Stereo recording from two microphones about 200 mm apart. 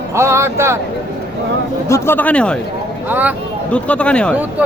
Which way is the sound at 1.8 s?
15° left (ahead or behind).